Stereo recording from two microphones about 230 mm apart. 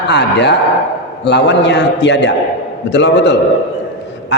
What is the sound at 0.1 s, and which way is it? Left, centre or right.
A man's voice, left.